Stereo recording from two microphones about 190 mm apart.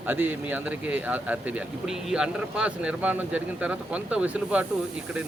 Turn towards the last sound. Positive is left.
turn(degrees=-5)  # may be behind; listen again after turning